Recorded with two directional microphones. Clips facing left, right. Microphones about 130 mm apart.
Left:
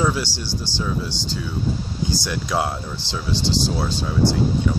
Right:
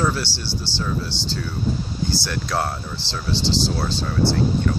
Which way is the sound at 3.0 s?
50° left (ahead or behind).